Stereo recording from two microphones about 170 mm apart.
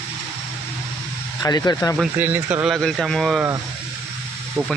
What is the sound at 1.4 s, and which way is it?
Speech, 20° left (ahead or behind).